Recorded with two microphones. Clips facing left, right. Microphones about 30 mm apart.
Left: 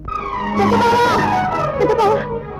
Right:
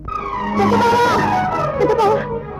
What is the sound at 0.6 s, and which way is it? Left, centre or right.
Music, centre.